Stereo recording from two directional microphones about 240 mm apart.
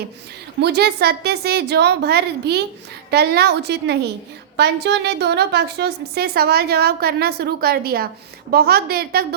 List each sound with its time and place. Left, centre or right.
0.6 s a woman's voice: right